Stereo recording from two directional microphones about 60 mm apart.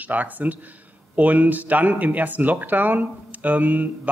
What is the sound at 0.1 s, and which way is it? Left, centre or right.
Speech, right.